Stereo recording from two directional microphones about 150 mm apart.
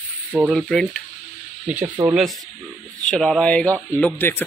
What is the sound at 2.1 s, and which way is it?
Speech, centre (ahead or behind).